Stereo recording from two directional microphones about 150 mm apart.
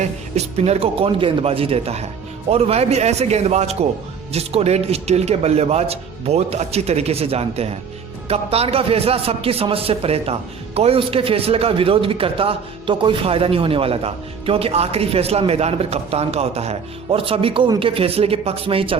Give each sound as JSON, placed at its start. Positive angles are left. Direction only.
{"t": 0.0, "sound": "a man's voice", "side_deg": -45}